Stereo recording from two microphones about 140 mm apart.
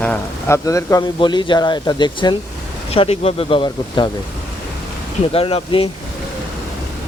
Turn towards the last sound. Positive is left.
turn(degrees=40)  # may be behind; listen again after turning